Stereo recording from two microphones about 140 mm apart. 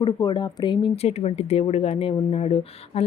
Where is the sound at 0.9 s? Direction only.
45° left (ahead or behind).